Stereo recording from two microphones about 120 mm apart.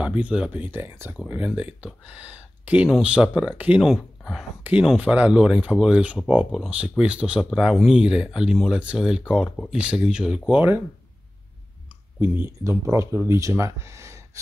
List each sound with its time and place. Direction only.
0.0 s speech: 10° right (ahead or behind)
12.2 s speech: 20° right (ahead or behind)